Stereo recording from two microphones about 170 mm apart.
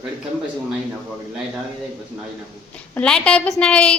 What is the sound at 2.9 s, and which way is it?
A woman's voice, 5° left (ahead or behind).